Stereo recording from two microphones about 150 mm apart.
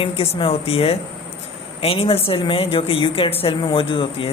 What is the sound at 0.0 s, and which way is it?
Speech, 40° left (ahead or behind).